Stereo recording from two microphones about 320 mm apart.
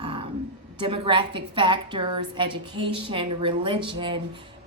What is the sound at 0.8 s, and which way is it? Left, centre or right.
A woman's voice, centre.